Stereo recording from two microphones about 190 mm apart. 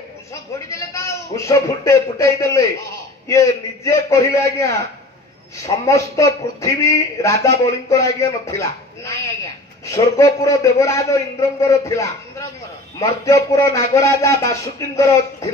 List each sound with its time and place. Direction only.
0.3 s a man's voice: 15° left (ahead or behind)